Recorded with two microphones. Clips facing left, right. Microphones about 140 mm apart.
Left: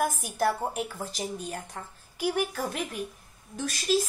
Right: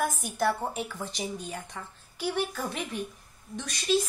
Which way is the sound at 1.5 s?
45° left (ahead or behind).